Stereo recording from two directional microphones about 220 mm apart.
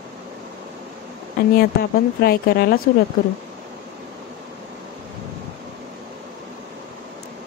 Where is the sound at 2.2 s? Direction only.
45° left (ahead or behind).